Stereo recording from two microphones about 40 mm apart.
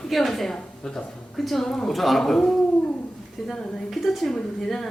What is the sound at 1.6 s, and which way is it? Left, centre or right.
Speech, centre.